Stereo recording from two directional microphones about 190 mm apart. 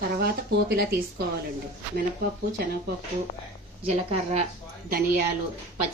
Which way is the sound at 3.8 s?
35° right (ahead or behind).